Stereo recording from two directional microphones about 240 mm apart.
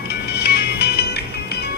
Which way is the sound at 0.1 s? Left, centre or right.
Left.